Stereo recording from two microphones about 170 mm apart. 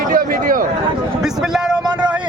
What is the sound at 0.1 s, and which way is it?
Speech, 55° right (ahead or behind).